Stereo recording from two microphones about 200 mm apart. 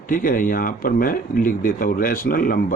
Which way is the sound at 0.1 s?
45° left (ahead or behind).